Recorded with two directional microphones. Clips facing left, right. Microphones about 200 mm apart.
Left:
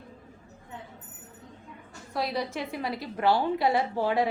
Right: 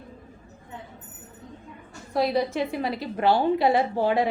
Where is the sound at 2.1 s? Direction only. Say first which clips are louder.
Right 7 dB; 25° right (ahead or behind).